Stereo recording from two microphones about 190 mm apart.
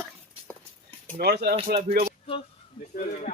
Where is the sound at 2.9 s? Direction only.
45° left (ahead or behind).